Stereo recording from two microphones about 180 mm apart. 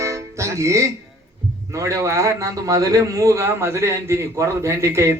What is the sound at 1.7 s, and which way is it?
A man's voice, 15° right (ahead or behind).